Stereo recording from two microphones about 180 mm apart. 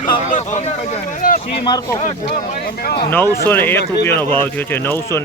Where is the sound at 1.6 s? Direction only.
25° left (ahead or behind).